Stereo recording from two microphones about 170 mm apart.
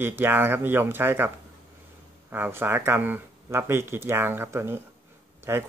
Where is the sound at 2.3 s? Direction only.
15° right (ahead or behind).